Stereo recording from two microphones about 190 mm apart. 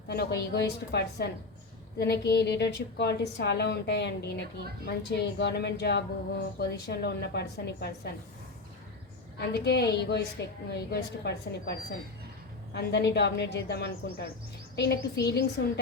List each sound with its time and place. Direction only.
0.1 s a woman's voice: 60° left (ahead or behind)
9.4 s a woman's voice: 60° left (ahead or behind)